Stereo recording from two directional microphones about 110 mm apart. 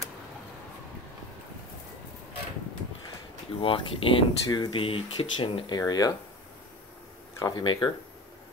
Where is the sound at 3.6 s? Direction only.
55° left (ahead or behind).